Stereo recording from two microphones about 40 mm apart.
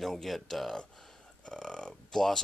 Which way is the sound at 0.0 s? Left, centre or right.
Centre.